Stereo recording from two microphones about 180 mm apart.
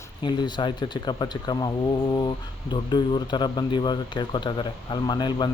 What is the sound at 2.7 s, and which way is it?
Speech, 25° left (ahead or behind).